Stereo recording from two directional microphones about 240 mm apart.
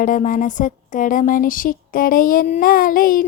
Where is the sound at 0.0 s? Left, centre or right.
Left.